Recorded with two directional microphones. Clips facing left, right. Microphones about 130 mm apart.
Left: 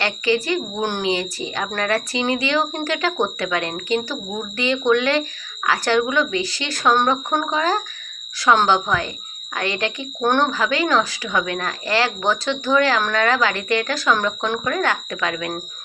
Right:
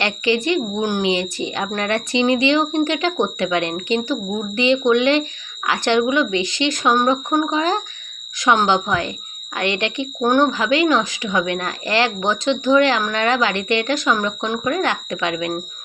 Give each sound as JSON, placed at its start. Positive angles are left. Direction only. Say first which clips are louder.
{"t": 0.0, "sound": "speech", "louder": "right 1 dB", "side_deg": 35}
{"t": 0.8, "sound": "speech", "louder": "right 3 dB", "side_deg": -10}
{"t": 1.0, "sound": "speech", "louder": "right 1 dB", "side_deg": 35}
{"t": 1.4, "sound": "speech", "louder": "right 2 dB", "side_deg": -25}
{"t": 9.6, "sound": "speech", "louder": "right 3 dB", "side_deg": 35}
{"t": 10.2, "sound": "speech", "louder": "right 2 dB", "side_deg": -10}
{"t": 11.7, "sound": "speech", "louder": "even", "side_deg": 35}
{"t": 12.3, "sound": "speech", "louder": "right 4 dB", "side_deg": -20}